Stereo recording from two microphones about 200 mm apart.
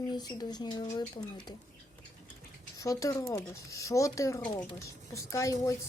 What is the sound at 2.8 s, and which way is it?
Speech, 15° left (ahead or behind).